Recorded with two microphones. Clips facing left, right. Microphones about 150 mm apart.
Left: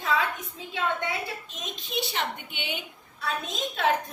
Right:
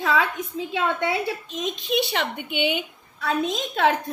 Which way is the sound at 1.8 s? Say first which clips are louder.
Right 5 dB; 75° right (ahead or behind).